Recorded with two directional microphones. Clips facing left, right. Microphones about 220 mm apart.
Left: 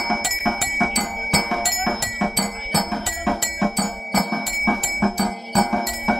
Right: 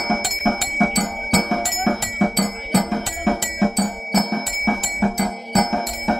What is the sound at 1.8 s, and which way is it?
Cowbell, 35° right (ahead or behind).